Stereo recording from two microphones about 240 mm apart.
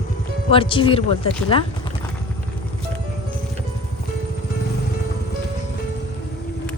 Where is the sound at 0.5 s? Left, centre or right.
Left.